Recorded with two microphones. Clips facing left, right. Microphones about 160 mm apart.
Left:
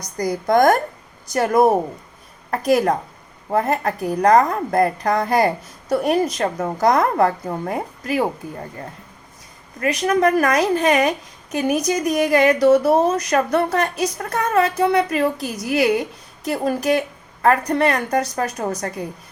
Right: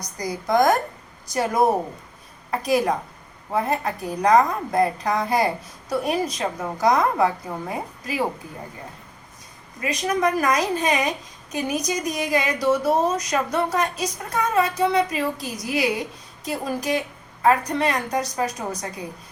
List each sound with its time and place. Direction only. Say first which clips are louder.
0.2 s a woman's voice: left 4 dB; 55° left (ahead or behind)
9.8 s speech: left 5 dB; 55° left (ahead or behind)